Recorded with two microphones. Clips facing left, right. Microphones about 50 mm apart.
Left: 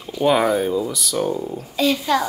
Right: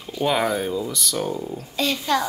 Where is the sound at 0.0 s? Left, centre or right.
Centre.